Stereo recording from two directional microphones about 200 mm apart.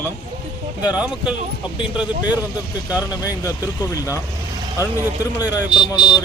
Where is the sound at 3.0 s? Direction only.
15° left (ahead or behind).